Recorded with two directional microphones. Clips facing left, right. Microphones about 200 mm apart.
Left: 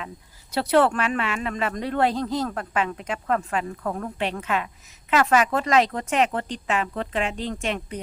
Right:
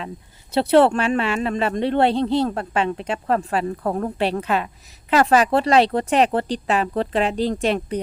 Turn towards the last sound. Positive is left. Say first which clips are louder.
# right 7 dB
turn(degrees=-35)  # may be behind; listen again after turning